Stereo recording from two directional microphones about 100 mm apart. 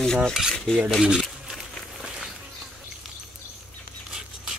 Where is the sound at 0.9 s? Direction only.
5° right (ahead or behind).